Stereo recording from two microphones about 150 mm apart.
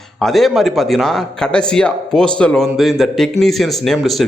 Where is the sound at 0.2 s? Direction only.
Centre (ahead or behind).